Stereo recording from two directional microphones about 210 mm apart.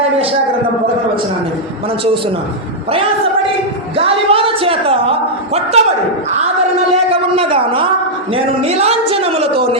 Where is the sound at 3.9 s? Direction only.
25° right (ahead or behind).